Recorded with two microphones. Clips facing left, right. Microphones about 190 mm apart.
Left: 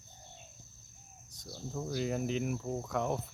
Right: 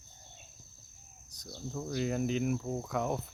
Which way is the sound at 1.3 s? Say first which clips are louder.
Right 1 dB; centre (ahead or behind).